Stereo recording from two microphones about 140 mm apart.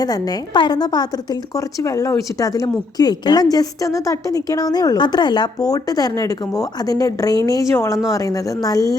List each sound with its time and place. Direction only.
0.0 s a woman's voice: 25° left (ahead or behind)